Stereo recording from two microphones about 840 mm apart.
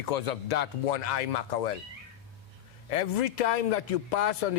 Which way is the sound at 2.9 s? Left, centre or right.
Left.